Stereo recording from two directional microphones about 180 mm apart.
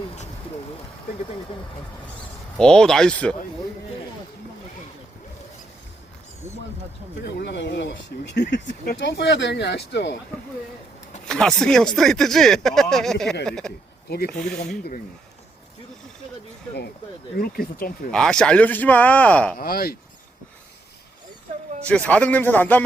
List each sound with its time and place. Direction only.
2.6 s speech: 5° left (ahead or behind)
7.2 s speech: 65° left (ahead or behind)
8.6 s speech: 45° left (ahead or behind)
9.0 s speech: 70° left (ahead or behind)
11.3 s speech: 5° left (ahead or behind)
14.6 s speech: 55° left (ahead or behind)
17.3 s speech: 55° left (ahead or behind)
18.1 s speech: 5° left (ahead or behind)
19.5 s speech: 55° left (ahead or behind)
21.8 s speech: 5° left (ahead or behind)